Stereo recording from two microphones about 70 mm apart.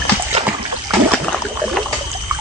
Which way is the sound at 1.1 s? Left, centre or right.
Centre.